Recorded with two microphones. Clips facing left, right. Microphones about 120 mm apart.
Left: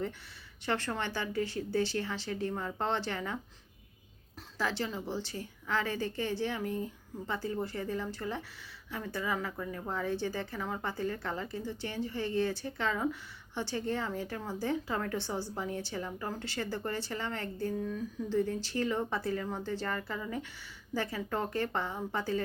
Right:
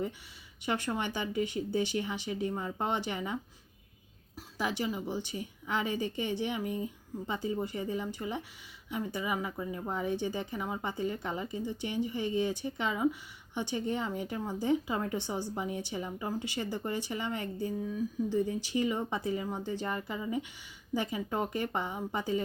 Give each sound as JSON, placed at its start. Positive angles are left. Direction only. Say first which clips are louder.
{"t": 0.6, "sound": "speech", "louder": "right 1 dB", "side_deg": -15}
{"t": 4.5, "sound": "speech", "louder": "right 1 dB", "side_deg": -15}